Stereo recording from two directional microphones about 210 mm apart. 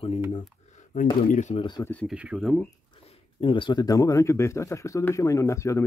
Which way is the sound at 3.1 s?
25° left (ahead or behind).